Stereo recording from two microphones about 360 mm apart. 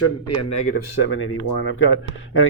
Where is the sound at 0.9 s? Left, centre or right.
Left.